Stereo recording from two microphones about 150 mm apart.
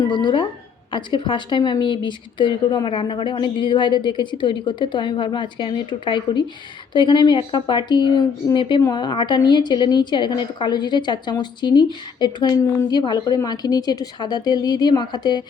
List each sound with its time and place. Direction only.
0.0 s a woman's voice: 30° left (ahead or behind)